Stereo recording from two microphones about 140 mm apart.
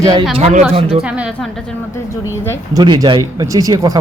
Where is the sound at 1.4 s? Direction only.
5° left (ahead or behind).